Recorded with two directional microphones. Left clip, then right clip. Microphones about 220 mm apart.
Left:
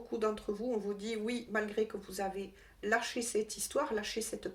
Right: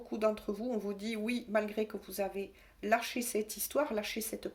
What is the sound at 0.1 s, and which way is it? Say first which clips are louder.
Speech: right 2 dB; 35° right (ahead or behind).